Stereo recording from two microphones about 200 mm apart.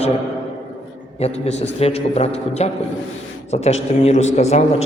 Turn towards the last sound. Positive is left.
turn(degrees=35)  # may be behind; listen again after turning